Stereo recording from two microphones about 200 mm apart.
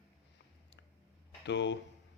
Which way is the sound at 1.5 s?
60° left (ahead or behind).